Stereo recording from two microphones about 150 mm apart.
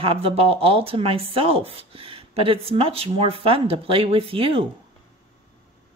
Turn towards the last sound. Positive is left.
turn(degrees=-35)  # may be behind; listen again after turning